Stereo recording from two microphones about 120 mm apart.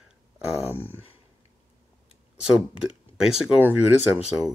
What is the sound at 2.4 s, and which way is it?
Speech, 5° right (ahead or behind).